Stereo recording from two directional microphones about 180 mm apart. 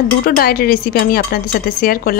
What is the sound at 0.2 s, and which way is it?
A woman's voice, 55° left (ahead or behind).